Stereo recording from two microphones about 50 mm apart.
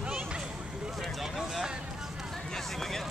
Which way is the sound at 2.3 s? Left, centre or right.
Centre.